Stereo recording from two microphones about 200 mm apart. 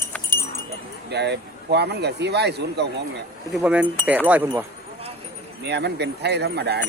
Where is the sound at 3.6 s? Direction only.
5° right (ahead or behind).